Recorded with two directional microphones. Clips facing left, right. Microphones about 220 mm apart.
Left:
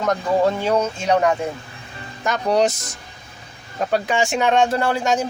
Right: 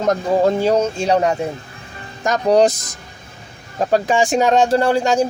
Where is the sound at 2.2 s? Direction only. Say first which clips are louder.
Right 5 dB; 40° right (ahead or behind).